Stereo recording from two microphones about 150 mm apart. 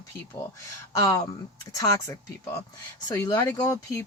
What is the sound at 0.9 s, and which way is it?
Speech, 25° left (ahead or behind).